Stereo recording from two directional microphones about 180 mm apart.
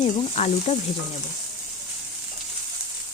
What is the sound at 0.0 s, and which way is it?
Sizzle, 35° left (ahead or behind).